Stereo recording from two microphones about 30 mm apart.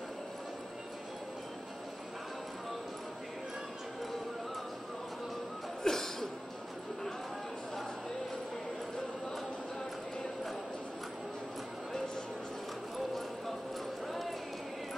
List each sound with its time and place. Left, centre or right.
5.9 s music: centre
14.0 s clip-clop: centre